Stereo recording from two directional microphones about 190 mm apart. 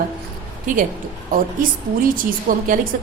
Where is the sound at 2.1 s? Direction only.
45° right (ahead or behind).